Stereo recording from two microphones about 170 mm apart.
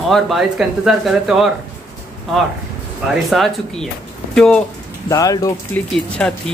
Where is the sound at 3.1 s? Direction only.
Centre (ahead or behind).